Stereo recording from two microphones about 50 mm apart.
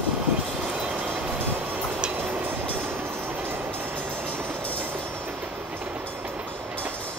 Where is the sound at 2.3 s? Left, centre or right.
Right.